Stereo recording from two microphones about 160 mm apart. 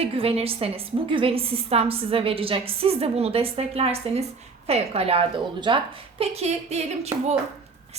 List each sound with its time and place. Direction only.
0.0 s a woman's voice: 35° right (ahead or behind)